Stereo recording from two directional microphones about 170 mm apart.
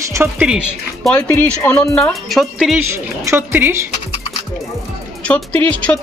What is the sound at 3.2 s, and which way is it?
Speech, 10° right (ahead or behind).